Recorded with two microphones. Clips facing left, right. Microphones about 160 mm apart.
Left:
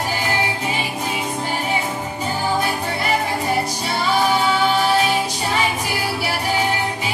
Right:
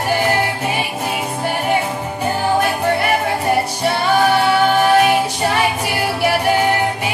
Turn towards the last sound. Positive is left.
turn(degrees=-60)  # may be behind; listen again after turning